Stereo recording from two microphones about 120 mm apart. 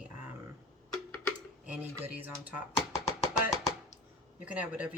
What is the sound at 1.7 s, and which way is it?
Speech, 15° right (ahead or behind).